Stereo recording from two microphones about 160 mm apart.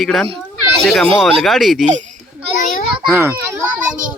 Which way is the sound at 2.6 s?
50° left (ahead or behind).